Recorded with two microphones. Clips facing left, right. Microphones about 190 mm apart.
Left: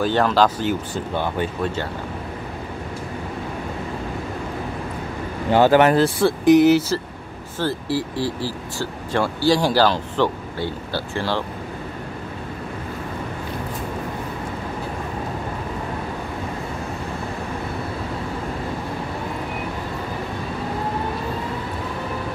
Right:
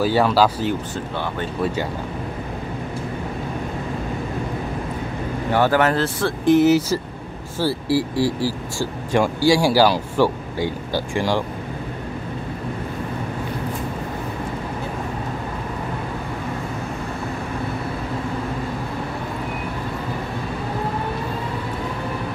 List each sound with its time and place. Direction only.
0.0 s speech: 5° right (ahead or behind)
1.1 s speech: 15° left (ahead or behind)
5.5 s speech: 20° left (ahead or behind)
6.6 s speech: 5° right (ahead or behind)